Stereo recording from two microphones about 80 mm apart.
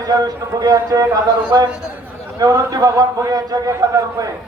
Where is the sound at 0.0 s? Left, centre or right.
Right.